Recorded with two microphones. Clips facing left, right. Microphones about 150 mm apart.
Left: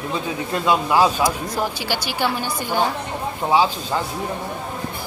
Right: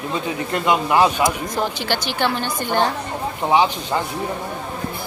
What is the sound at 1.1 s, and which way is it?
A woman's voice, 10° left (ahead or behind).